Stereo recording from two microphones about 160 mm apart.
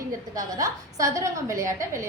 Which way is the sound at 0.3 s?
20° right (ahead or behind).